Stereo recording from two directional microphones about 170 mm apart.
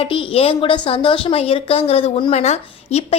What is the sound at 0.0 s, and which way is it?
A woman's voice, 30° left (ahead or behind).